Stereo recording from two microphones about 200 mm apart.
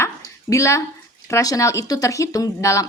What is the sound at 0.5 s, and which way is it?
A woman's voice, 15° left (ahead or behind).